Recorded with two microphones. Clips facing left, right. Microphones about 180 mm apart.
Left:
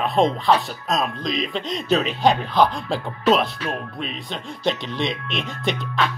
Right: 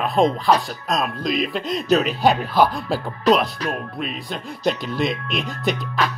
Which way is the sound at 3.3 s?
40° right (ahead or behind).